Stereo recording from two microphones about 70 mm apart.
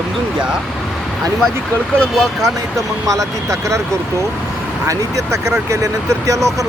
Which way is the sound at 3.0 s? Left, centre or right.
Right.